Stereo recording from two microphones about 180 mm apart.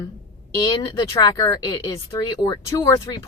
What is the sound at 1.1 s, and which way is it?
Speech, 20° left (ahead or behind).